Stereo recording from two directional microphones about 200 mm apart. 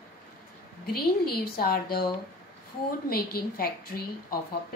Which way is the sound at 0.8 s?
50° left (ahead or behind).